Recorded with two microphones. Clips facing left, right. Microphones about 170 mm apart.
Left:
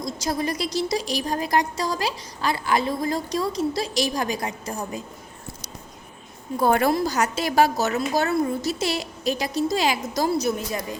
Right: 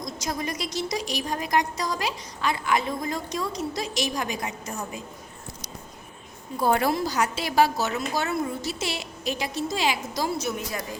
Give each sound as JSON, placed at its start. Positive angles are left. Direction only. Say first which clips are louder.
{"t": 0.0, "sound": "a woman's voice", "louder": "left 5 dB", "side_deg": 30}
{"t": 6.6, "sound": "a woman's voice", "louder": "left 3 dB", "side_deg": 55}
{"t": 6.9, "sound": "a woman's voice", "louder": "left 3 dB", "side_deg": 45}